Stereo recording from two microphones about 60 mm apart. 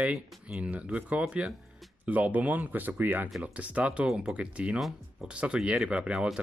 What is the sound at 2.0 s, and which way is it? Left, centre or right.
Speech, right.